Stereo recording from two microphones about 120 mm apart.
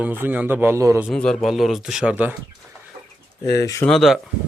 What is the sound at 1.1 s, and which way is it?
Speech, 5° left (ahead or behind).